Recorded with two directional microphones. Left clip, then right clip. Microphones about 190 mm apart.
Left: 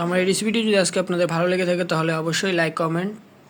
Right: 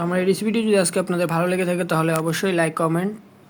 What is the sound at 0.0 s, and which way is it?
Speech, 5° right (ahead or behind).